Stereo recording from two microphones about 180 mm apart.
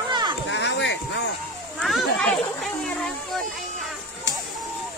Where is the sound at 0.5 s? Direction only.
85° left.